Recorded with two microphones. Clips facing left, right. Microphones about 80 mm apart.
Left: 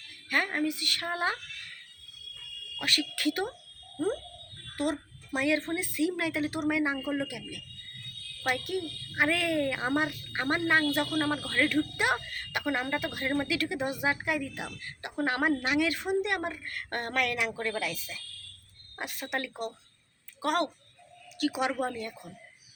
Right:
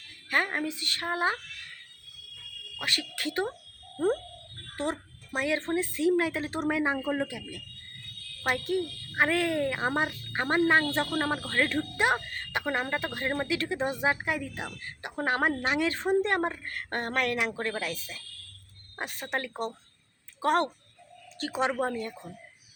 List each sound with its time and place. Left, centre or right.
0.3 s a woman's voice: right
2.7 s a child's voice: right